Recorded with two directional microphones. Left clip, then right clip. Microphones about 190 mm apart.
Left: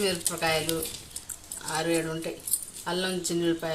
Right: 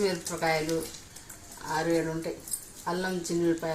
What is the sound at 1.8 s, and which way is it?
Speech, 15° left (ahead or behind).